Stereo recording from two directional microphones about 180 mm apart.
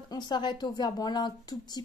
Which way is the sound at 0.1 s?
25° left (ahead or behind).